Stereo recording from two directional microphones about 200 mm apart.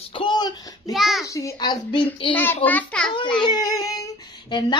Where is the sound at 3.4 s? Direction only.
20° left (ahead or behind).